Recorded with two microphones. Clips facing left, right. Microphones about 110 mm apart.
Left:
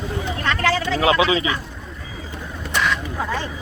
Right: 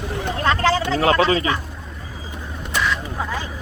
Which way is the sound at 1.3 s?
45° right (ahead or behind).